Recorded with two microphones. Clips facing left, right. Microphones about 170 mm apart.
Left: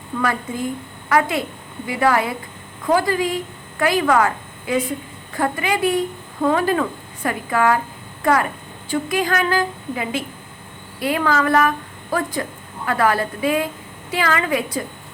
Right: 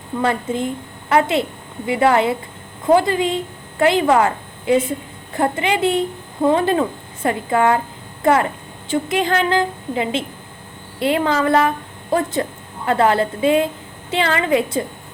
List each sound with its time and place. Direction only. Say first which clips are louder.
0.2 s a woman's voice: right 3 dB; 25° right (ahead or behind)